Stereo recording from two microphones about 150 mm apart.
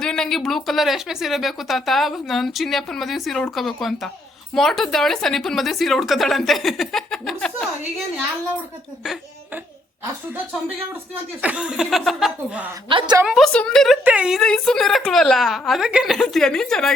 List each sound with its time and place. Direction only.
0.0 s a woman's voice: 5° left (ahead or behind)
11.1 s a woman's voice: 10° right (ahead or behind)
12.9 s a woman's voice: 35° right (ahead or behind)
13.2 s a woman's voice: centre (ahead or behind)